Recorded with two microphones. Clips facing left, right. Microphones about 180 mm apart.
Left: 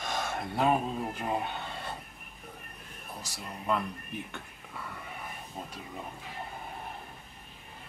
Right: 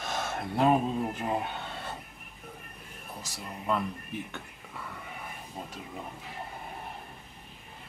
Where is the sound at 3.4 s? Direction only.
Centre (ahead or behind).